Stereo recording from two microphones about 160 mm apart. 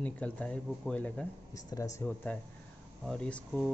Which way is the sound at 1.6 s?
20° left (ahead or behind).